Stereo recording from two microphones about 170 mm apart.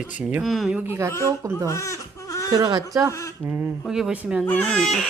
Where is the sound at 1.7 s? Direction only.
15° left (ahead or behind).